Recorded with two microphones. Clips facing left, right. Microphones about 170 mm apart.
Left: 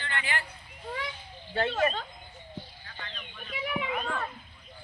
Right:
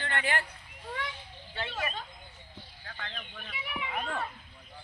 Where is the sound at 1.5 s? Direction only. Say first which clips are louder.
Left 9 dB; 50° left (ahead or behind).